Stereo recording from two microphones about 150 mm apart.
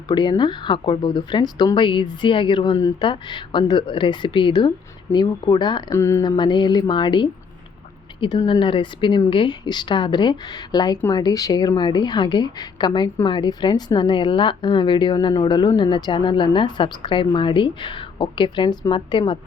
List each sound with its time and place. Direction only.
0.1 s speech: 30° left (ahead or behind)